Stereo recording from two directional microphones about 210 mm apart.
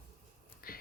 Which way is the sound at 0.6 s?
45° left (ahead or behind).